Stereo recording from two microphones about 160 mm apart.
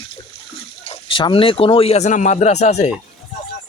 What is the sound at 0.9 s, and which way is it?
A man's voice, 30° left (ahead or behind).